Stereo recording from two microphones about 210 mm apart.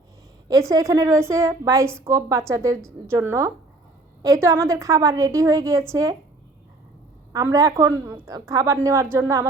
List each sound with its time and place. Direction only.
0.4 s a woman's voice: 15° right (ahead or behind)
7.3 s a woman's voice: 15° right (ahead or behind)